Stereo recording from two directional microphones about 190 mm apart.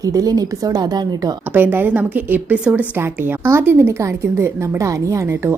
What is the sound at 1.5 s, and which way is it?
A woman's voice, 10° right (ahead or behind).